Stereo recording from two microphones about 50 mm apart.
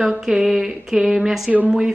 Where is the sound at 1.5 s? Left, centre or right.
Right.